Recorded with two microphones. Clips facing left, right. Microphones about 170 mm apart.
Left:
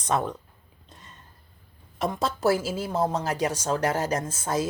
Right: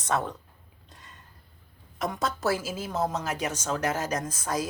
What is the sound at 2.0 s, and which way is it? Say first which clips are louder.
A woman's voice: left 3 dB; 30° left (ahead or behind).